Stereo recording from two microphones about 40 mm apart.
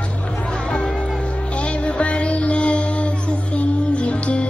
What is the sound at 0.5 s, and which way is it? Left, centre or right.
Music, left.